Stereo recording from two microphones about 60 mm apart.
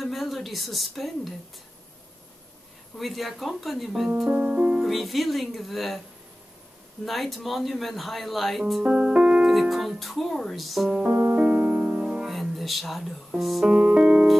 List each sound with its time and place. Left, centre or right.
0.0 s speech: centre
3.0 s speech: centre
4.3 s speech: right
4.8 s speech: centre
7.1 s speech: centre
8.8 s keyboard: centre
9.5 s speech: centre
11.1 s music: right
12.3 s a sound: centre
13.4 s speech: centre
13.7 s music: right